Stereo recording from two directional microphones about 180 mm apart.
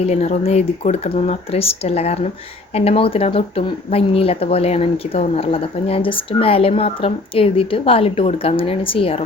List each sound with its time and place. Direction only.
0.0 s speech: 35° left (ahead or behind)